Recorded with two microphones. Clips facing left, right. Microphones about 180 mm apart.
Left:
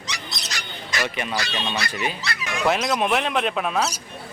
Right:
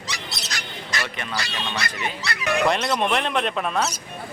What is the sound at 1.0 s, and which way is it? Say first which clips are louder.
Speech: left 3 dB; 15° left (ahead or behind).